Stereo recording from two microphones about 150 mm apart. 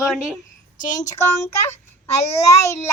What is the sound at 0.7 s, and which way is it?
Speech, 60° left (ahead or behind).